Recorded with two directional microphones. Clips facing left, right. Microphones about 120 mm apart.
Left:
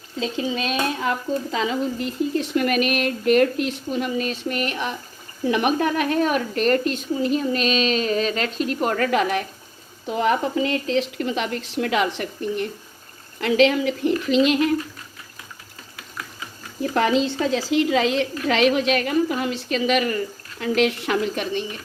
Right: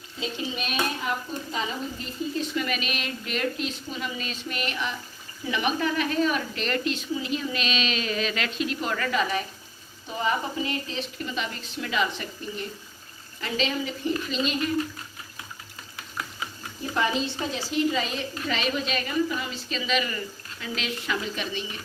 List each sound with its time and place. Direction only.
0.2 s speech: 90° left; by 9.4 s 60° left (ahead or behind)
10.1 s a woman's voice: 85° left
16.9 s a woman's voice: 90° left; by 21.6 s 55° left (ahead or behind)